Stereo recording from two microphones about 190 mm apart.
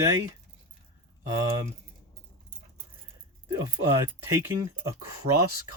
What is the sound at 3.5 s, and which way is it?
Speech, 15° right (ahead or behind).